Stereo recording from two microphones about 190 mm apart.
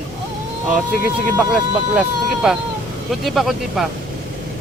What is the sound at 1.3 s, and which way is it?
A man's voice, 5° right (ahead or behind).